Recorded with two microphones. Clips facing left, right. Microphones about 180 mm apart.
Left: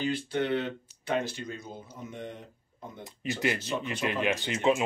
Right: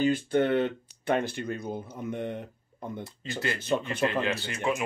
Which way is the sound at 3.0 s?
15° left (ahead or behind).